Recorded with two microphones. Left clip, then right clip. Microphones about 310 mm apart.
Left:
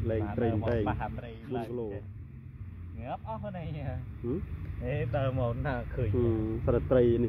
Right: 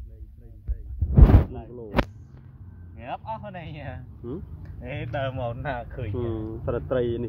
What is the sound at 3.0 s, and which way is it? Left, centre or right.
Speech, left.